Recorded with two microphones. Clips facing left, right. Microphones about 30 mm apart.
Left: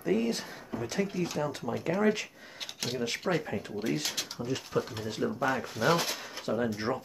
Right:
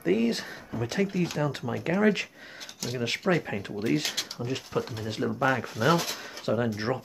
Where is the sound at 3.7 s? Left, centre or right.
Centre.